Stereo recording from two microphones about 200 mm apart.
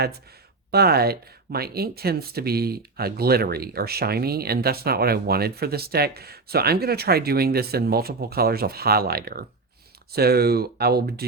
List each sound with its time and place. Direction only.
0.7 s speech: 50° right (ahead or behind)